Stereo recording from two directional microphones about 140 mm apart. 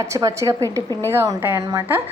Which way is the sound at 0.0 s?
25° right (ahead or behind).